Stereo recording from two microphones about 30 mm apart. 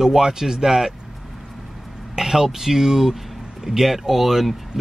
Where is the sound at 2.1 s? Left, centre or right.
Centre.